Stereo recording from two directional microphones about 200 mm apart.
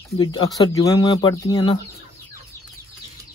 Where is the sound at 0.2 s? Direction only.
20° left (ahead or behind).